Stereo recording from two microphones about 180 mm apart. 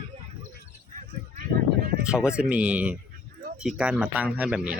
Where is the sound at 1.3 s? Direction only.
55° right (ahead or behind).